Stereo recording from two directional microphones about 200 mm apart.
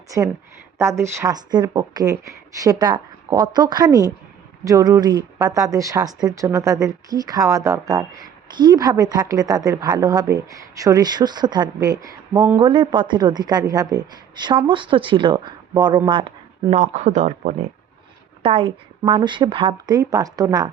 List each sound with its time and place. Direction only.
0.8 s a woman's voice: 15° right (ahead or behind)
16.0 s a sound: 25° right (ahead or behind)
16.7 s a woman's voice: 35° right (ahead or behind); by 20.7 s 20° right (ahead or behind)